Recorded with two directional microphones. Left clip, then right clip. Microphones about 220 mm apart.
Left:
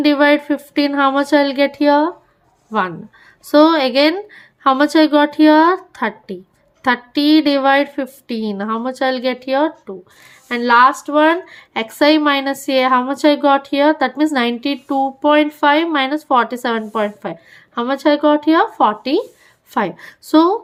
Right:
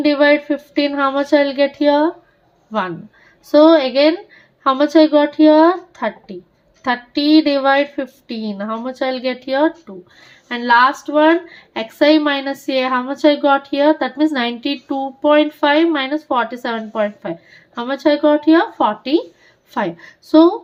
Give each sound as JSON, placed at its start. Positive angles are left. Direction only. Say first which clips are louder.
{"t": 0.0, "sound": "speech", "louder": "even", "side_deg": 30}
{"t": 3.5, "sound": "speech", "louder": "right 1 dB", "side_deg": 30}